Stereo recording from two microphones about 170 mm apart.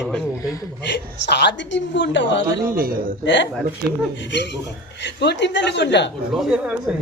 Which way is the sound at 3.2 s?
90° left.